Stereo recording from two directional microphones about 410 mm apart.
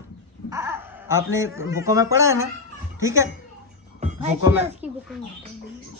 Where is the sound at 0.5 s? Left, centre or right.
Centre.